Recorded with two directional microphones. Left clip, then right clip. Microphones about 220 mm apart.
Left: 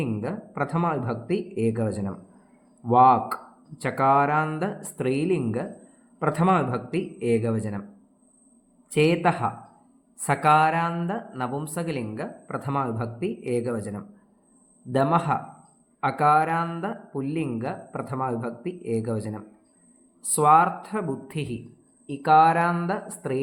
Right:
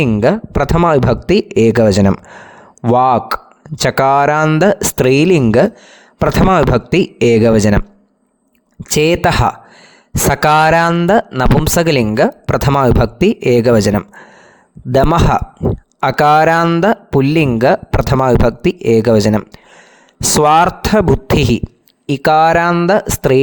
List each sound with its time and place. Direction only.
0.0 s speech: 50° right (ahead or behind)
8.9 s speech: 50° right (ahead or behind)